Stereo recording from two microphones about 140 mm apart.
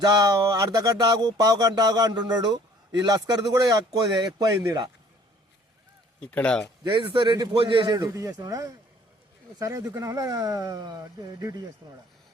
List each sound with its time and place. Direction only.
0.0 s speech: 30° right (ahead or behind)
6.1 s speech: 10° left (ahead or behind)
6.8 s a man's voice: 35° right (ahead or behind)
7.9 s speech: 25° right (ahead or behind)